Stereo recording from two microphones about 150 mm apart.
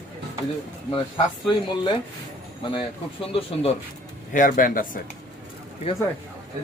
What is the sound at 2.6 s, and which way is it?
Speech, 35° left (ahead or behind).